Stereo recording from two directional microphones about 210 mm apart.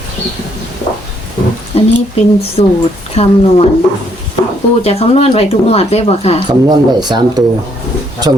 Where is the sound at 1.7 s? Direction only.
30° left (ahead or behind).